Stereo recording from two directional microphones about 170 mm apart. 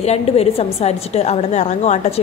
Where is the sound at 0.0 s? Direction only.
35° left (ahead or behind).